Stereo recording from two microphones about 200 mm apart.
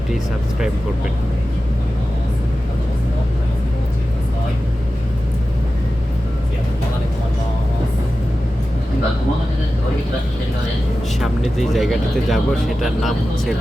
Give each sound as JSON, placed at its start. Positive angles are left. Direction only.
{"t": 11.2, "sound": "speech", "side_deg": 0}